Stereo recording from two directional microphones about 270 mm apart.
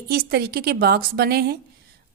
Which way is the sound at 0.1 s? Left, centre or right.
Right.